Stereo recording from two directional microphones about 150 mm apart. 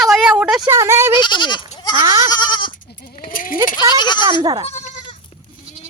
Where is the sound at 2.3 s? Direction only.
30° left (ahead or behind).